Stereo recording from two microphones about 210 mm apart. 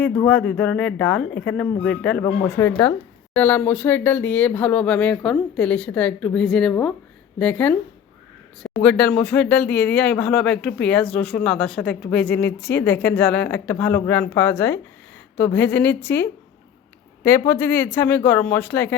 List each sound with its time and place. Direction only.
0.3 s speech: 5° left (ahead or behind)
12.5 s speech: 55° left (ahead or behind)
12.7 s speech: 10° left (ahead or behind)